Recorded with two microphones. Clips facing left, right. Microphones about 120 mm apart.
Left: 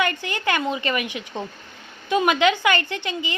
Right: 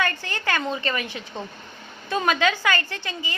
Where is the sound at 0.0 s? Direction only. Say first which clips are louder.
Left 3 dB; 15° left (ahead or behind).